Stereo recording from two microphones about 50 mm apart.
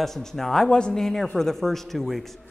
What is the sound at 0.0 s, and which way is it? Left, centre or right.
Speech, centre.